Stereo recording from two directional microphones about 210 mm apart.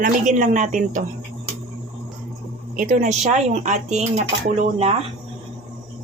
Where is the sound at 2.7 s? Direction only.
35° right (ahead or behind).